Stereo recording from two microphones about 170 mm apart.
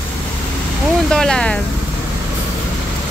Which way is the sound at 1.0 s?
5° left (ahead or behind).